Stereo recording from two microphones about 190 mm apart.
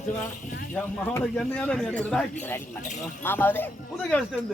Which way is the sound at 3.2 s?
10° left (ahead or behind).